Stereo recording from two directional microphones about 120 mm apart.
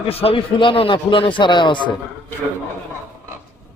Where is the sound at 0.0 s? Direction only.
55° left (ahead or behind).